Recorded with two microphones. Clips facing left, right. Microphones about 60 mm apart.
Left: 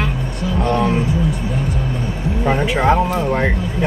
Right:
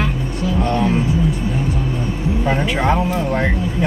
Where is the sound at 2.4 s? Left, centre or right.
Centre.